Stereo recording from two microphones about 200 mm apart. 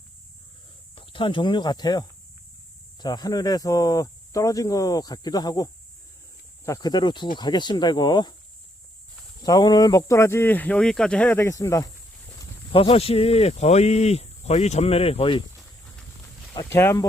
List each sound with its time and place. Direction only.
0.9 s speech: 25° left (ahead or behind)
9.4 s speech: 20° left (ahead or behind)
12.7 s speech: 30° left (ahead or behind)
16.6 s speech: 15° left (ahead or behind)